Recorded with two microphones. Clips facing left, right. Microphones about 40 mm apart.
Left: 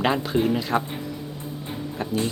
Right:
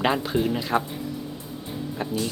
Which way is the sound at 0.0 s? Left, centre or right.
Centre.